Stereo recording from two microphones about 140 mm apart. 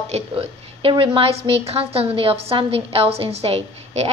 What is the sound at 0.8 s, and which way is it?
A woman's voice, 40° right (ahead or behind).